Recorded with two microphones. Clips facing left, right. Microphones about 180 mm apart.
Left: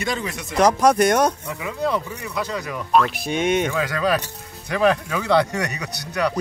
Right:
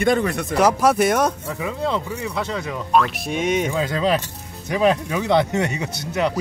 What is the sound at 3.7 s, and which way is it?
Speech, 25° right (ahead or behind).